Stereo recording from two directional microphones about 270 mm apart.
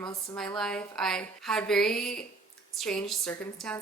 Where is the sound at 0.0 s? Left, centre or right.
Centre.